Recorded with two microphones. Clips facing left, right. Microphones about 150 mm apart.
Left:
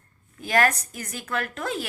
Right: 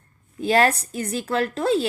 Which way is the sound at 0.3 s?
30° right (ahead or behind).